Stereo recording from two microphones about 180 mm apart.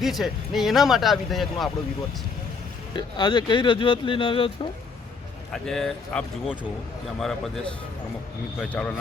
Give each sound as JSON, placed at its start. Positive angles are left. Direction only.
{"t": 0.0, "sound": "speech", "side_deg": 0}
{"t": 2.9, "sound": "speech", "side_deg": 25}
{"t": 5.5, "sound": "speech", "side_deg": 5}